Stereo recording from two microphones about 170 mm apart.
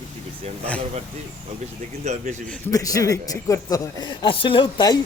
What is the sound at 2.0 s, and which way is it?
Speech, 40° right (ahead or behind).